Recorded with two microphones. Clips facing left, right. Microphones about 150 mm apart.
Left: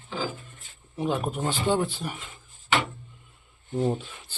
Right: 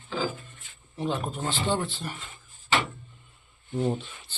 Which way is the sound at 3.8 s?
10° left (ahead or behind).